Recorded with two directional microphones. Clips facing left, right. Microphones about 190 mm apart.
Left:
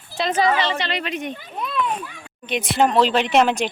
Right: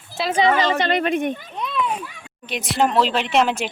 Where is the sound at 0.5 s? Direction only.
45° right (ahead or behind).